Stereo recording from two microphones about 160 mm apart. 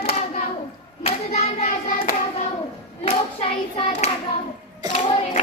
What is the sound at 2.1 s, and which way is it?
Clapping, 50° left (ahead or behind).